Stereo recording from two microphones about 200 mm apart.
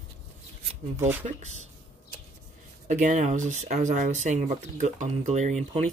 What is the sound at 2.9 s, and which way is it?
Speech, 40° right (ahead or behind).